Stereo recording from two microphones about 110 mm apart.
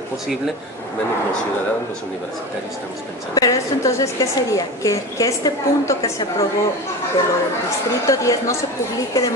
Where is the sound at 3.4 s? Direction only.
30° left (ahead or behind).